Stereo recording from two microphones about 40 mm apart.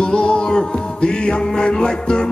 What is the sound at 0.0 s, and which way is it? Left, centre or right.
Music, left.